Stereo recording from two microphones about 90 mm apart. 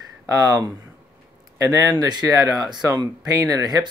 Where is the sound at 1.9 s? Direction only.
50° right (ahead or behind).